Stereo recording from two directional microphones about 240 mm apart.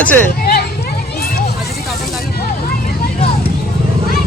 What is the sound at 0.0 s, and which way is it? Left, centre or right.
Speech, centre.